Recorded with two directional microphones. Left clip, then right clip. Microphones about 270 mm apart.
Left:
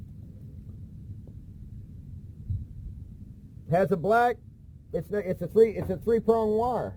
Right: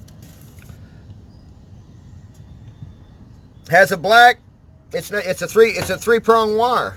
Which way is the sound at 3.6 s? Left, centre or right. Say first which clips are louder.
Right 11 dB; right.